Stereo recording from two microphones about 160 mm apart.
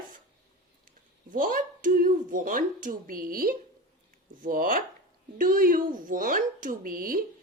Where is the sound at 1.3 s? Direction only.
60° right (ahead or behind).